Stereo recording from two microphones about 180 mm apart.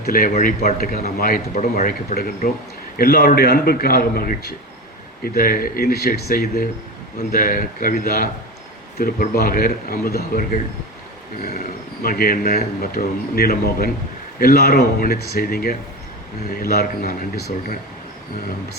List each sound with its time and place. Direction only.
0.0 s a man's voice: 55° left (ahead or behind)